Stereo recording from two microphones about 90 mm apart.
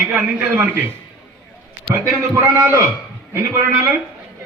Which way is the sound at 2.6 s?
30° right (ahead or behind).